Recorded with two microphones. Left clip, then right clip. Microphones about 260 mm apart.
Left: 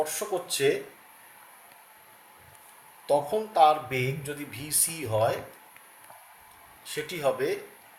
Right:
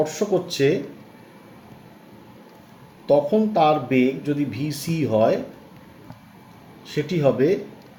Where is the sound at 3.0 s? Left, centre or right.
Centre.